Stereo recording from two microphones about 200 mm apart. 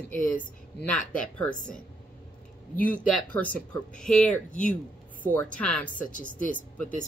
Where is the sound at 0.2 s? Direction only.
45° left (ahead or behind).